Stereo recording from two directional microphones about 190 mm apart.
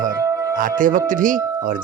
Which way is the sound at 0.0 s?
15° right (ahead or behind).